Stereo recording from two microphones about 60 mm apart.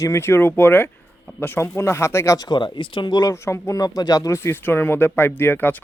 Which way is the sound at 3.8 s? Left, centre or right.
Left.